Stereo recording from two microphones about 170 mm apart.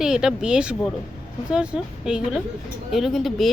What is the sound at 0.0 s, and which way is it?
Speech, 5° right (ahead or behind).